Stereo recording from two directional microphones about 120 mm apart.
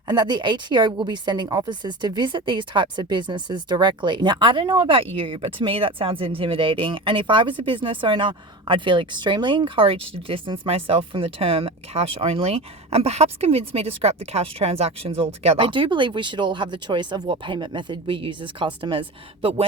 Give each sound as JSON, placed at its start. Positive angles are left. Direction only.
{"t": 0.1, "sound": "a woman's voice", "side_deg": -35}